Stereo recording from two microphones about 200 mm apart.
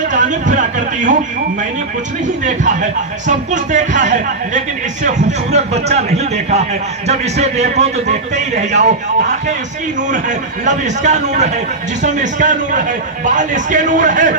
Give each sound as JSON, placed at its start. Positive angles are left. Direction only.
{"t": 0.1, "sound": "speech", "side_deg": -40}
{"t": 2.2, "sound": "speech", "side_deg": -40}
{"t": 10.1, "sound": "speech", "side_deg": -35}